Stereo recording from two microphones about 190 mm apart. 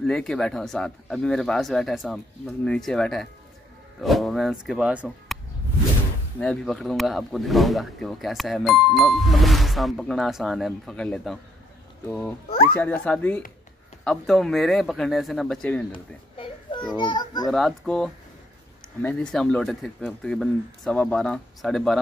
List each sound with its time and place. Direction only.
0.0 s speech: 5° left (ahead or behind)
6.4 s speech: centre (ahead or behind)
15.9 s a sound: 25° left (ahead or behind)
16.9 s a child's voice: 25° left (ahead or behind)
17.5 s speech: centre (ahead or behind)